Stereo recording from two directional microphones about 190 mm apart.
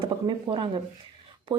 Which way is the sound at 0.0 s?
25° right (ahead or behind).